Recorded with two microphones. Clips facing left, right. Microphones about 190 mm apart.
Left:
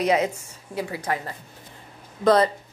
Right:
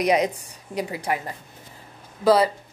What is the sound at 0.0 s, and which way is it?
A woman's voice, 15° right (ahead or behind).